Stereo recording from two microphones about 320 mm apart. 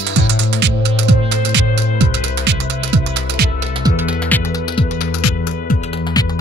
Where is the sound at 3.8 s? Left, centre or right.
Centre.